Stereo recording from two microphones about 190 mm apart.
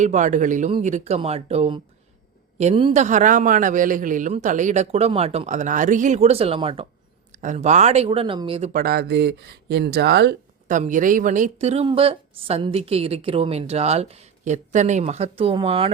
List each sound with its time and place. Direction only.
0.0 s speech: 40° right (ahead or behind)
8.7 s speech: 55° right (ahead or behind)
10.7 s speech: 40° right (ahead or behind)